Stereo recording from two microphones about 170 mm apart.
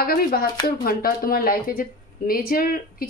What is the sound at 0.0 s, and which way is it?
Speech, 60° left (ahead or behind).